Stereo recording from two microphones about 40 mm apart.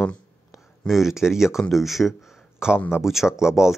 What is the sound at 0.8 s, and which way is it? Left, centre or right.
Speech, centre.